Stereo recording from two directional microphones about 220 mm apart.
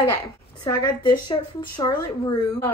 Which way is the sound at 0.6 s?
20° left (ahead or behind).